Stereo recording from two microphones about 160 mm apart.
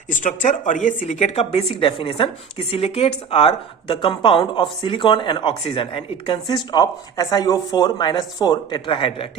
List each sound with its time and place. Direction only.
0.1 s speech: 50° left (ahead or behind); by 9.2 s 35° left (ahead or behind)